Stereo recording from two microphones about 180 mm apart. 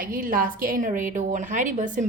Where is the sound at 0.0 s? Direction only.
50° right (ahead or behind).